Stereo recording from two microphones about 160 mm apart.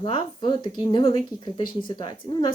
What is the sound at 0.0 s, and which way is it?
Speech, 30° left (ahead or behind).